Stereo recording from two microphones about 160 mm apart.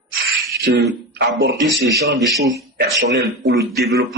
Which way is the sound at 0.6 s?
90° right.